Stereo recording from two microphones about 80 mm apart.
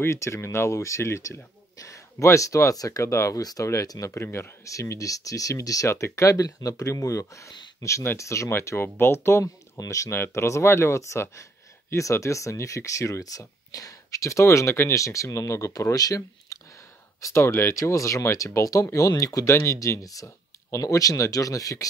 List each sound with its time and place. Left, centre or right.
0.0 s speech: left
16.5 s a sound: left
17.2 s speech: left